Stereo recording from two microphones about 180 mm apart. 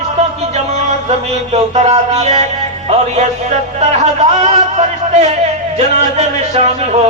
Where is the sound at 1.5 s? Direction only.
40° right (ahead or behind).